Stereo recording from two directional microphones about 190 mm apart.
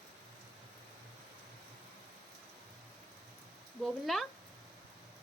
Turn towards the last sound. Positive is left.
turn(degrees=0)  # may be behind; listen again after turning